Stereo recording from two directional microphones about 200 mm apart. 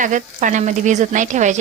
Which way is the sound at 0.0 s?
40° right (ahead or behind).